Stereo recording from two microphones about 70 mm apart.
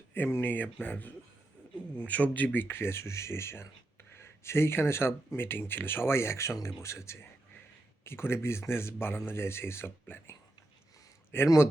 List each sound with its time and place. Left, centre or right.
0.1 s speech: left
11.4 s speech: left